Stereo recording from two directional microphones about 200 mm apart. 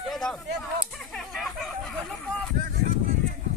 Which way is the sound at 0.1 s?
5° left (ahead or behind).